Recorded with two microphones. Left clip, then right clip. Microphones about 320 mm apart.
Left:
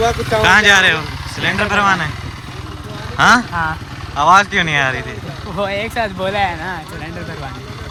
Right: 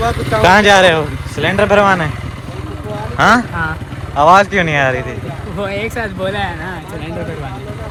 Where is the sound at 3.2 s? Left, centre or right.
Centre.